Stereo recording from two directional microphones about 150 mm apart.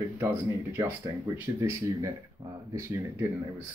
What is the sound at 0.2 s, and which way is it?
Speech, 15° right (ahead or behind).